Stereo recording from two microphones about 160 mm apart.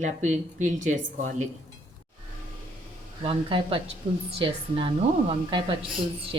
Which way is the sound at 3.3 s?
35° right (ahead or behind).